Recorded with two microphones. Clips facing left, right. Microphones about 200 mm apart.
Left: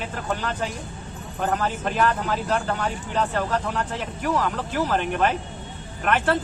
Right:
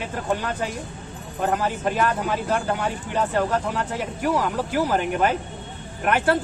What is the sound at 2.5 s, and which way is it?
Speech, 10° right (ahead or behind).